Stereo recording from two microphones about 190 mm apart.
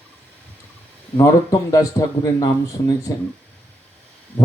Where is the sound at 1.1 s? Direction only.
20° left (ahead or behind).